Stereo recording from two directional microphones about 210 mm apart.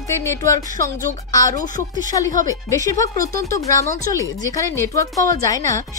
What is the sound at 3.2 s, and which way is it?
Speech, 45° right (ahead or behind).